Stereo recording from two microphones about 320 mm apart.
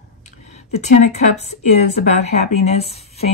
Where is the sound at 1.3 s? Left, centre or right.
Left.